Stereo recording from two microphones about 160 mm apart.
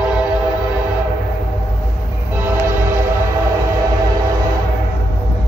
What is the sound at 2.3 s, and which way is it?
Train, 15° right (ahead or behind).